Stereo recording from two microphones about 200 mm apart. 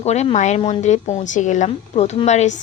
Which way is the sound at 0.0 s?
35° left (ahead or behind).